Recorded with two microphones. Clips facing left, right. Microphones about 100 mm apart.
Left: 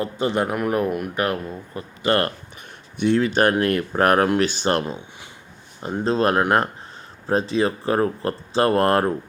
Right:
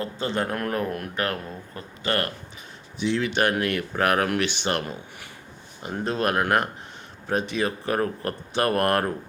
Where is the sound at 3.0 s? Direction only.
50° left (ahead or behind).